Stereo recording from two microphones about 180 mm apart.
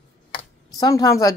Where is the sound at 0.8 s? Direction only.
20° left (ahead or behind).